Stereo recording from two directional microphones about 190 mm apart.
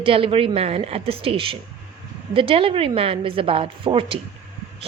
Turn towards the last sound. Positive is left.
turn(degrees=-30)  # may be behind; listen again after turning